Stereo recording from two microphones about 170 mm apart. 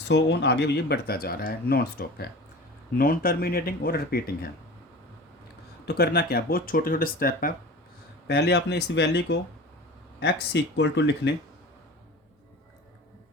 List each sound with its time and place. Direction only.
0.1 s speech: 90° left; by 4.2 s 65° left (ahead or behind)
5.8 s speech: 70° left (ahead or behind)
8.3 s speech: 80° left